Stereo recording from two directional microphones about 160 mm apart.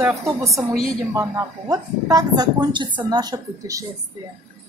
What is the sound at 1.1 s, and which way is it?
Speech, 15° right (ahead or behind).